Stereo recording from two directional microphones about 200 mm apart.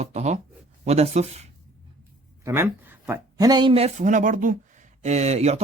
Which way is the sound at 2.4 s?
10° right (ahead or behind).